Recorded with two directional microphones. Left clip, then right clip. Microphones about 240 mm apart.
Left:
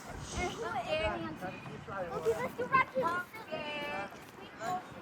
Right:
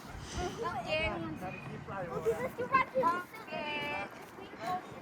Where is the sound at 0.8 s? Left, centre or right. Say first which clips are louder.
Even; left.